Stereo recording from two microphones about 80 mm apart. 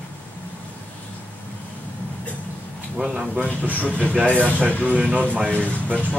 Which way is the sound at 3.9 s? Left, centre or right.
Centre.